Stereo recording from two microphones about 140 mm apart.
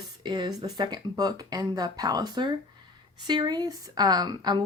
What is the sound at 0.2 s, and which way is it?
A woman's voice, 30° right (ahead or behind).